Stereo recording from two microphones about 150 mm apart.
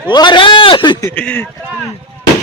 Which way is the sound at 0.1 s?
30° left (ahead or behind).